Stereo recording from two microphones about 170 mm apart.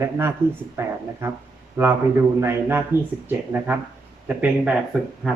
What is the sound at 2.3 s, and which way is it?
Speech, 15° right (ahead or behind).